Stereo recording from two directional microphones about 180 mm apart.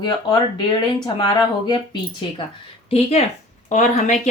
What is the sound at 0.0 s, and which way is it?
Speech, 25° left (ahead or behind).